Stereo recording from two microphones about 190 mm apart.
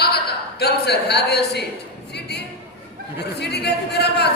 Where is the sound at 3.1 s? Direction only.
60° left (ahead or behind).